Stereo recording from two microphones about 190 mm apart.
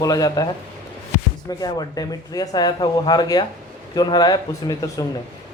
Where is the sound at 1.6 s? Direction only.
20° left (ahead or behind).